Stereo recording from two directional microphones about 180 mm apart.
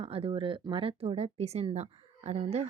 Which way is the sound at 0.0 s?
35° right (ahead or behind).